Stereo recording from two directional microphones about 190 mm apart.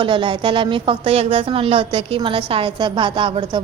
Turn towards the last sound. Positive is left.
turn(degrees=-25)  # may be behind; listen again after turning